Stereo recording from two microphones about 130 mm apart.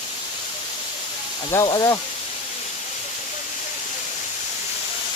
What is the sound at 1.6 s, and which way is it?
Speech, 30° left (ahead or behind).